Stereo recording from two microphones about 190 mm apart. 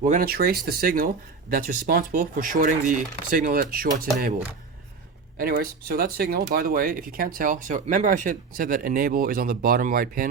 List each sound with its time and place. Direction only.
0.0 s speech: 45° right (ahead or behind)
5.4 s speech: 50° right (ahead or behind)